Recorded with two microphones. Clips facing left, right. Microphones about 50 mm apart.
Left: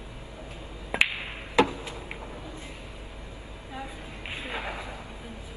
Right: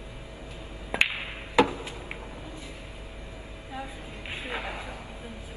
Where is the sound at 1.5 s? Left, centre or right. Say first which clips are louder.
Right 1 dB; centre.